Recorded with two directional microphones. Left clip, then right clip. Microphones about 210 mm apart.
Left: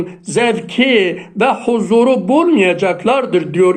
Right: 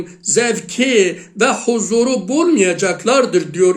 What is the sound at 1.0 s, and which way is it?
Speech, 50° right (ahead or behind).